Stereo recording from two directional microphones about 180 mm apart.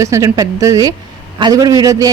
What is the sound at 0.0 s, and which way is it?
A woman's voice, 15° right (ahead or behind).